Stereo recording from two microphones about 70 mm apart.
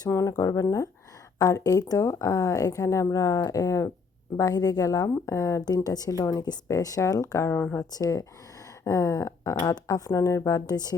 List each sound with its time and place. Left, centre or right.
0.1 s speech: left
4.4 s speech: left
5.6 s speech: left
6.3 s speech: left
6.7 s speech: left
8.8 s a sound: left
9.6 s speech: left
10.7 s speech: left